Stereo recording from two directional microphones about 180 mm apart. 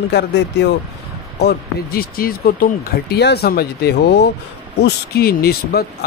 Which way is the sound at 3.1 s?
65° left (ahead or behind).